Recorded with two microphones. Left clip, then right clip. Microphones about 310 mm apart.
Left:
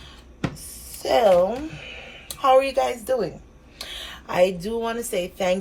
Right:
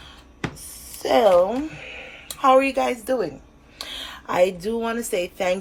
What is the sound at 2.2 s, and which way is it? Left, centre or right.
A woman's voice, centre.